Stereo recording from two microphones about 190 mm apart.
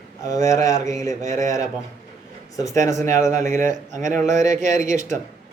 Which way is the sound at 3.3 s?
40° right (ahead or behind).